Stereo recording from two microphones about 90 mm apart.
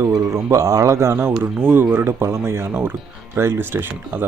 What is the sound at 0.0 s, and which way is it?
Speech, 40° right (ahead or behind).